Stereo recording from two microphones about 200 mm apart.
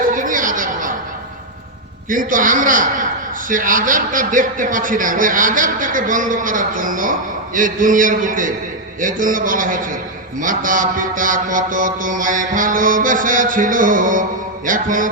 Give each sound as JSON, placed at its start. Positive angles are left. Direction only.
{"t": 0.1, "sound": "chatter", "side_deg": -40}
{"t": 2.0, "sound": "a man's voice", "side_deg": -40}
{"t": 9.0, "sound": "mantra", "side_deg": -40}